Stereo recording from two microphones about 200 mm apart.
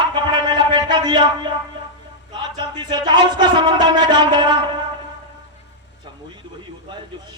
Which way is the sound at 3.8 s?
20° right (ahead or behind).